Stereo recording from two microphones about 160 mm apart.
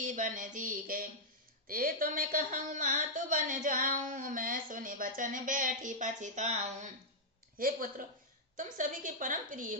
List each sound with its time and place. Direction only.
0.0 s speech: 55° right (ahead or behind)
7.6 s speech: 60° right (ahead or behind)